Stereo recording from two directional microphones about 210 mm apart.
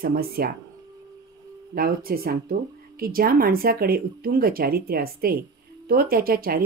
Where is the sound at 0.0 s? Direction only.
45° right (ahead or behind).